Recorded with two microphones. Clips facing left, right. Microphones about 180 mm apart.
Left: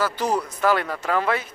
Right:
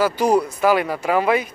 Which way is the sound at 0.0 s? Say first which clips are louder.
Right 6 dB; 10° right (ahead or behind).